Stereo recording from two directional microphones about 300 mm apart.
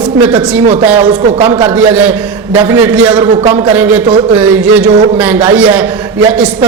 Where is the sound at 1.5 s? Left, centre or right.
Centre.